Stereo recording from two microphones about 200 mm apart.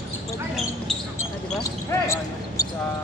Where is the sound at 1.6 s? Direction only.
15° left (ahead or behind).